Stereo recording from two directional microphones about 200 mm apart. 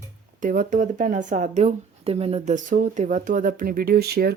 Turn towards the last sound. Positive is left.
turn(degrees=-50)  # may be behind; listen again after turning